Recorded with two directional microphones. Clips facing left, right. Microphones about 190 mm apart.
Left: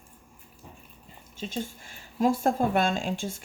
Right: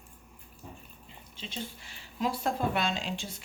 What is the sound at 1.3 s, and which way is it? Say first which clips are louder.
Speech: left 7 dB; 45° left (ahead or behind).